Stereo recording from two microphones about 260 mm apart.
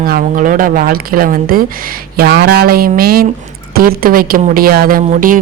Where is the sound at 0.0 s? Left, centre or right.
Right.